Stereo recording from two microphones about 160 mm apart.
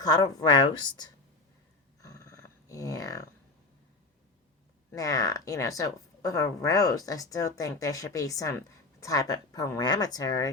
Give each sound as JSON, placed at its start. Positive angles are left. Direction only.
{"t": 0.0, "sound": "a woman's voice", "side_deg": 25}
{"t": 2.0, "sound": "dog", "side_deg": 20}
{"t": 4.9, "sound": "a woman's voice", "side_deg": 20}